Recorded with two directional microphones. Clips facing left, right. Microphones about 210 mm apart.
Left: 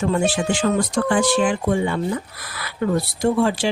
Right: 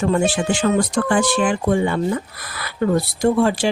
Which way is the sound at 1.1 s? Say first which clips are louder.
Left 2 dB; 55° right (ahead or behind).